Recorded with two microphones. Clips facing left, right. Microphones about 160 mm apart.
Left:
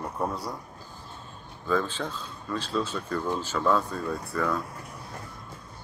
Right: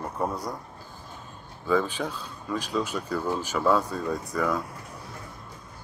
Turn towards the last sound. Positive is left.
turn(degrees=-10)  # may be behind; listen again after turning